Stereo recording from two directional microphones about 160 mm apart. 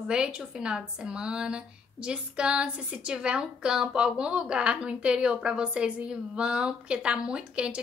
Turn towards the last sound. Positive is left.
turn(degrees=-5)  # may be behind; listen again after turning